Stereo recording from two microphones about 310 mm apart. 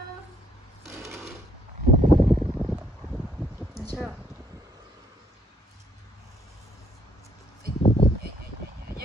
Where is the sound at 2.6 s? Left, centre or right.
Centre.